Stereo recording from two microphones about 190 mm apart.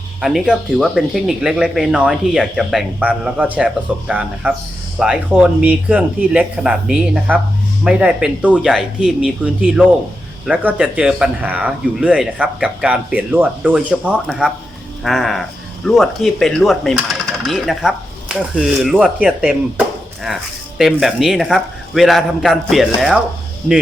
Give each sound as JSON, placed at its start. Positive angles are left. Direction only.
{"t": 0.2, "sound": "speech", "side_deg": 0}